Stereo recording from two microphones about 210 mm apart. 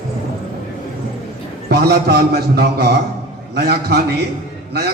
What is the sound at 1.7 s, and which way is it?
A man's voice, 50° right (ahead or behind).